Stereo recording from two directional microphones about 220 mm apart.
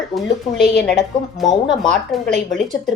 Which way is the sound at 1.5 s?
20° left (ahead or behind).